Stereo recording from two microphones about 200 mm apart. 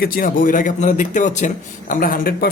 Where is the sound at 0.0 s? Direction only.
45° left (ahead or behind).